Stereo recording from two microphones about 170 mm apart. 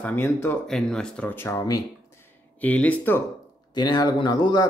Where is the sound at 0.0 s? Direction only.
10° left (ahead or behind).